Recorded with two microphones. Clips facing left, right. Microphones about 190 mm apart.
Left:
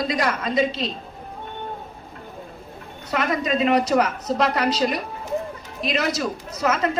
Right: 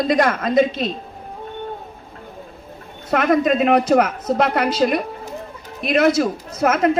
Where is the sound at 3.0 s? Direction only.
50° right (ahead or behind).